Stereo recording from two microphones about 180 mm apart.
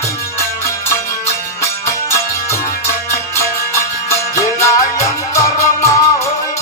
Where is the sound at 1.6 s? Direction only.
15° left (ahead or behind).